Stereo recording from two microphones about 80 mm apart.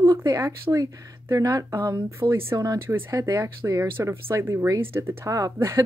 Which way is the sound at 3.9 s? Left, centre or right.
Right.